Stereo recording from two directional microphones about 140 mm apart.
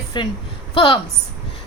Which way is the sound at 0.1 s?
30° left (ahead or behind).